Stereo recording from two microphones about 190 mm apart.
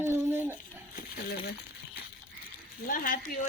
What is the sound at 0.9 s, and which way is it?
Speech, 55° left (ahead or behind).